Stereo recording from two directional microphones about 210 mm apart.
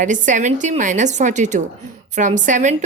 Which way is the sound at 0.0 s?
35° right (ahead or behind).